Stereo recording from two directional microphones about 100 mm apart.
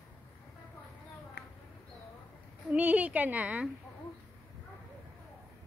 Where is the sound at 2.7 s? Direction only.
15° right (ahead or behind).